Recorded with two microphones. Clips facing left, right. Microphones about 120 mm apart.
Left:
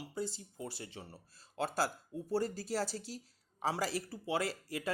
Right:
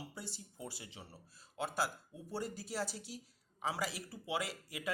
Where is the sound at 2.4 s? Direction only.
40° left (ahead or behind).